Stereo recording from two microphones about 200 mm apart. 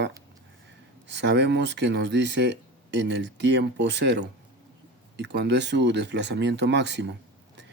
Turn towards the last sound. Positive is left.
turn(degrees=-60)  # may be behind; listen again after turning